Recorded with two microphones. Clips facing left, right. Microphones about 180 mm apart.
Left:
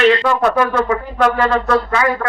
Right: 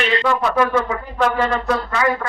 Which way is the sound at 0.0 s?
65° left (ahead or behind).